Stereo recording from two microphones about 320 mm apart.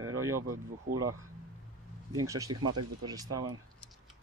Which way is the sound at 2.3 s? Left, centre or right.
Centre.